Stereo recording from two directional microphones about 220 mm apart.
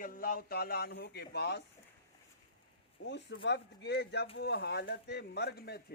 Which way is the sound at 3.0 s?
55° left (ahead or behind).